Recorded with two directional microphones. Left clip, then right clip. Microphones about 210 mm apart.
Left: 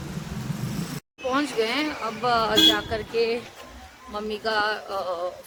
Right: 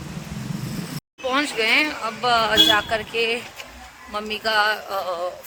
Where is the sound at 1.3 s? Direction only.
5° right (ahead or behind).